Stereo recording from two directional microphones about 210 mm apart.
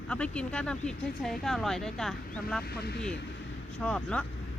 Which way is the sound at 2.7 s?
50° left (ahead or behind).